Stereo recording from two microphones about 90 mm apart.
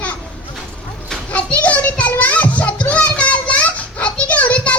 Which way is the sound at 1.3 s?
15° left (ahead or behind).